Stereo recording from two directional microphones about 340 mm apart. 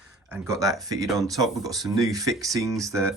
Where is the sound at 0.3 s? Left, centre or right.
Centre.